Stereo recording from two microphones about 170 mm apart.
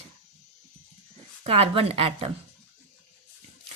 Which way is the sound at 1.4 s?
35° right (ahead or behind).